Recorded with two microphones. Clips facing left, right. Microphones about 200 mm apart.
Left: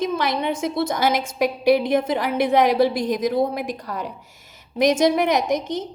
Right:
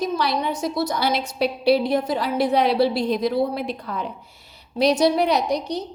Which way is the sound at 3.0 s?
45° left (ahead or behind).